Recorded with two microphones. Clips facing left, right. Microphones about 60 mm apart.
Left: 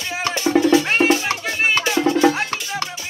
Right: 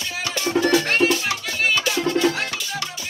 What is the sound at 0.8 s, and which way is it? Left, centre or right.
Music, left.